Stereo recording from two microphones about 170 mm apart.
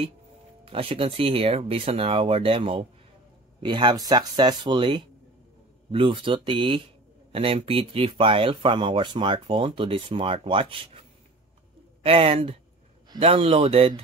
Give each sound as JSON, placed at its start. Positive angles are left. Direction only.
{"t": 0.7, "sound": "speech", "side_deg": -35}
{"t": 12.0, "sound": "speech", "side_deg": -35}